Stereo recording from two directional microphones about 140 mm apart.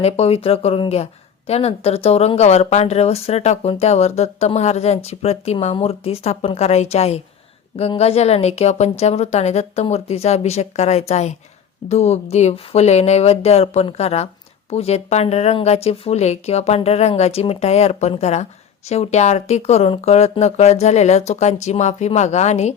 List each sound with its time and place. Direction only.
0.0 s speech: 45° left (ahead or behind)